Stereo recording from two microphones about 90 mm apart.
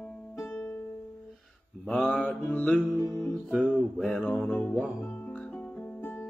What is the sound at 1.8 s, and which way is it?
Mantra, 10° left (ahead or behind).